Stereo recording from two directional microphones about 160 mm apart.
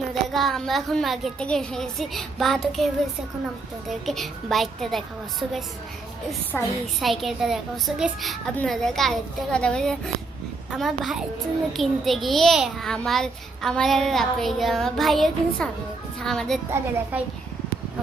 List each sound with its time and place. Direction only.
0.1 s a child's voice: centre (ahead or behind)
4.0 s a child's voice: centre (ahead or behind)
16.7 s a woman's voice: 10° right (ahead or behind)